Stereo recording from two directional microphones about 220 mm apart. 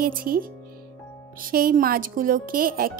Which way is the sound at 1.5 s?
40° right (ahead or behind).